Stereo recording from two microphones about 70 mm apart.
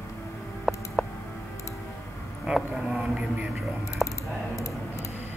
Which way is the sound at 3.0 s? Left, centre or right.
Centre.